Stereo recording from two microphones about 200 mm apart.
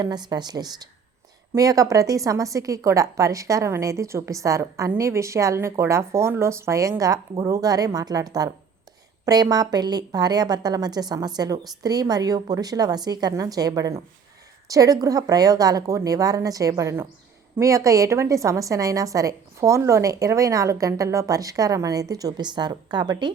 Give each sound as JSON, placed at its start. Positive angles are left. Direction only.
{"t": 0.0, "sound": "a woman's voice", "side_deg": -20}